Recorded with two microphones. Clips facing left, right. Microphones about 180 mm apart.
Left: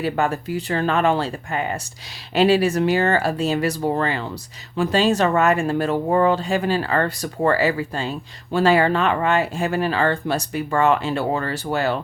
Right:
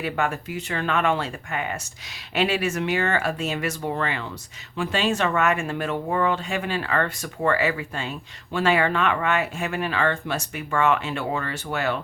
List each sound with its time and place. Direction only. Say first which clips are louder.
0.0 s speech: left 4 dB; 35° left (ahead or behind)